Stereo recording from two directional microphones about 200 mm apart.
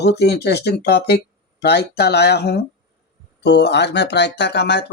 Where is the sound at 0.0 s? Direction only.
55° left (ahead or behind).